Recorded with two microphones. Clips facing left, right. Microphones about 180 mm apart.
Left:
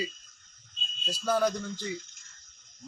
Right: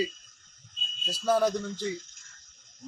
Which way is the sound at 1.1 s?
Centre (ahead or behind).